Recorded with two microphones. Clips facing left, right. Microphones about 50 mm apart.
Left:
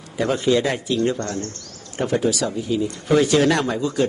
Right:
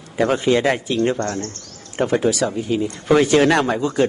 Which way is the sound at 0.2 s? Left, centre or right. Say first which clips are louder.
Right 2 dB; right.